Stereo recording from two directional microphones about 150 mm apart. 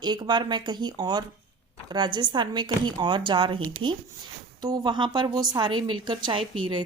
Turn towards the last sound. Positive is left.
turn(degrees=-35)  # may be behind; listen again after turning